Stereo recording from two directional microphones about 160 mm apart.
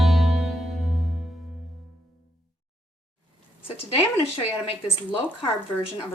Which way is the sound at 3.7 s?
40° left (ahead or behind).